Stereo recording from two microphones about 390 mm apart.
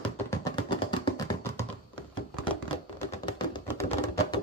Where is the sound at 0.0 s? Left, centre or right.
Centre.